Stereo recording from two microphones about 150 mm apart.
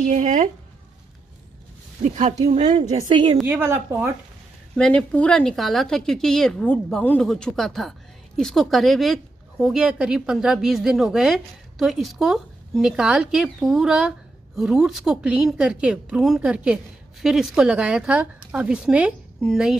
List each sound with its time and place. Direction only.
0.0 s speech: 55° right (ahead or behind)
2.0 s speech: 50° right (ahead or behind)
3.1 s a woman's voice: 35° right (ahead or behind)
3.4 s a woman's voice: 15° right (ahead or behind)
4.7 s a woman's voice: 5° left (ahead or behind)